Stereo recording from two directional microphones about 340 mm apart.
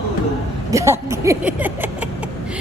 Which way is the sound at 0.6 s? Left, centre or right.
Centre.